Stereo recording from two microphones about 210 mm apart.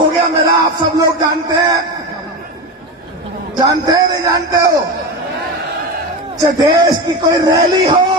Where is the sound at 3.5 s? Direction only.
20° right (ahead or behind).